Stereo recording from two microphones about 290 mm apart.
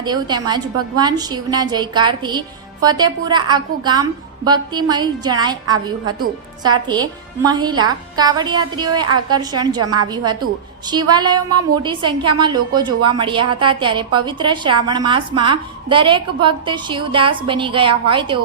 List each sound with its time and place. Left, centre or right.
0.0 s a woman's voice: centre
9.8 s a woman's voice: right
10.8 s a woman's voice: centre